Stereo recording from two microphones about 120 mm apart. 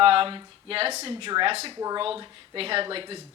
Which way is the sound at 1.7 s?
30° right (ahead or behind).